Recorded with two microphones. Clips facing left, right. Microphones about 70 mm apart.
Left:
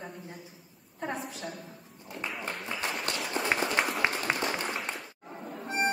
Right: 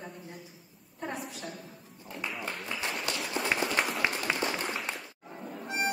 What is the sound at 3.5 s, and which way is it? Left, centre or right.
Run, left.